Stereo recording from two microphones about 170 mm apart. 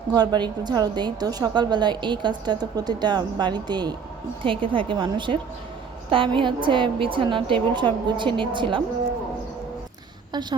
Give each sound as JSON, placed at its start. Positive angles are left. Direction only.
{"t": 0.1, "sound": "a woman's voice", "side_deg": -25}
{"t": 10.3, "sound": "a woman's voice", "side_deg": -25}